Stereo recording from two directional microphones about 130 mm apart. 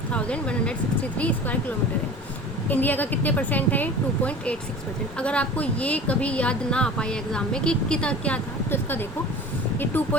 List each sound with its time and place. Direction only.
0.1 s a woman's voice: 10° left (ahead or behind)
2.6 s a woman's voice: 15° left (ahead or behind)